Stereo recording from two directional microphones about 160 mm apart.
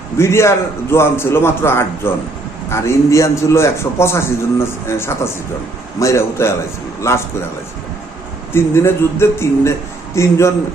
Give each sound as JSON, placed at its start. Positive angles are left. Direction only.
{"t": 0.2, "sound": "a man's voice", "side_deg": 15}
{"t": 8.5, "sound": "a man's voice", "side_deg": 15}